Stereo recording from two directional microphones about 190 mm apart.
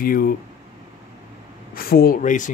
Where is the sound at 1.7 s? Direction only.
50° left (ahead or behind).